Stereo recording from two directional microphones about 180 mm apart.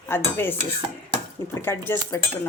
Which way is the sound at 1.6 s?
15° left (ahead or behind).